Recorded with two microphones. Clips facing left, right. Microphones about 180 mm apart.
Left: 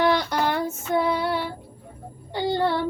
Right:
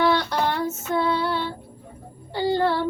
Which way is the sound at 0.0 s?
15° left (ahead or behind).